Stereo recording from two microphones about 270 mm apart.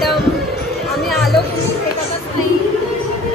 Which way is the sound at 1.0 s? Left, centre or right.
Centre.